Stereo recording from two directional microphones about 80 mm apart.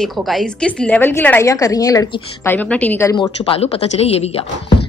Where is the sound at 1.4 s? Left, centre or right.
Left.